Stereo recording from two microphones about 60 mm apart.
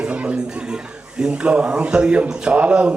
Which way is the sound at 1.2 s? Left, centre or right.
Centre.